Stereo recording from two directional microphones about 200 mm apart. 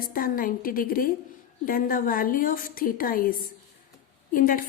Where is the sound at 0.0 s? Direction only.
45° left (ahead or behind).